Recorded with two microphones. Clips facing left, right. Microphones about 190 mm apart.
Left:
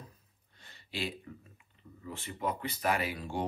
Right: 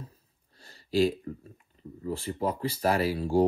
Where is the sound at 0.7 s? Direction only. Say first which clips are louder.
Right 14 dB; 40° right (ahead or behind).